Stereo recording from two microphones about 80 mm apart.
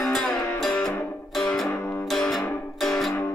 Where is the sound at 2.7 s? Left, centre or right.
Centre.